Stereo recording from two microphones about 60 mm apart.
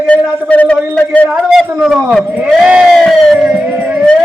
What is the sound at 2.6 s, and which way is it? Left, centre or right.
Crowd, centre.